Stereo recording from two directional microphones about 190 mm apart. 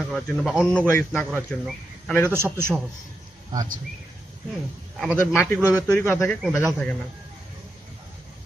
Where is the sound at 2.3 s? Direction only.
10° right (ahead or behind).